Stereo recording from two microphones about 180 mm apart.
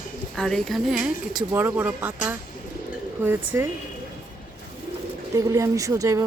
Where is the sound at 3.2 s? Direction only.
10° right (ahead or behind).